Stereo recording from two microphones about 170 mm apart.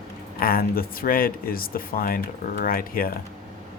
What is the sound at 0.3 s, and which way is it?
Speech, 60° left (ahead or behind).